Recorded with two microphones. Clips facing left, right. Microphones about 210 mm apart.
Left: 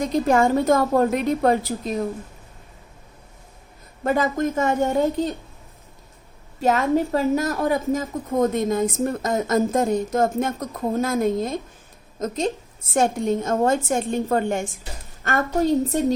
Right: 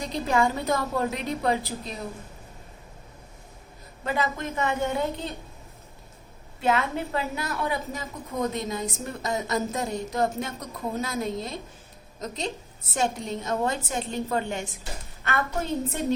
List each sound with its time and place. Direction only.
0.0 s a woman's voice: 50° left (ahead or behind)
4.0 s a woman's voice: 45° left (ahead or behind)
6.6 s a woman's voice: 40° left (ahead or behind)